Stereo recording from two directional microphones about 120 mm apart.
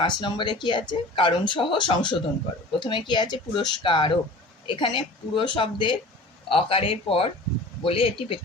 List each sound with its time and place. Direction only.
0.0 s speech: 40° left (ahead or behind)